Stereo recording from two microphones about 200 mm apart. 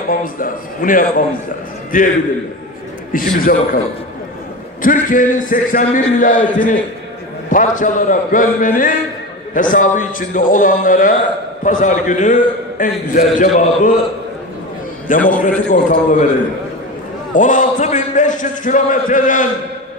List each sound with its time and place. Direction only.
0.1 s a man's voice: 45° left (ahead or behind)
4.8 s a man's voice: 40° left (ahead or behind)
15.0 s a man's voice: 40° left (ahead or behind)
17.3 s a man's voice: 40° left (ahead or behind)